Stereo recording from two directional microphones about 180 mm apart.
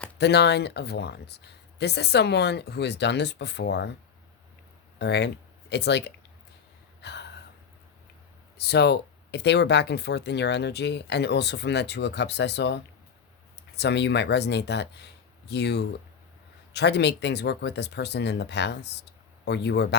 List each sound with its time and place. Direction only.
0.2 s speech: 70° left (ahead or behind)
4.9 s speech: 70° left (ahead or behind)
7.0 s a sound: 70° left (ahead or behind)
8.5 s speech: 65° left (ahead or behind)